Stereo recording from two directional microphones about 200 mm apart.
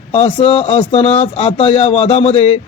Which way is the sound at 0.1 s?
25° left (ahead or behind).